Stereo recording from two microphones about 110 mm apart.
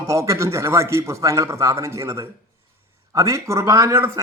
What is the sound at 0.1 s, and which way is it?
Speech, 25° right (ahead or behind).